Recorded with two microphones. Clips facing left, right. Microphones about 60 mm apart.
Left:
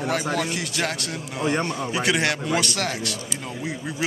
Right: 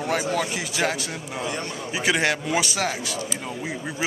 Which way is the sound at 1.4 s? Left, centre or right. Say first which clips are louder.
Left 8 dB; left.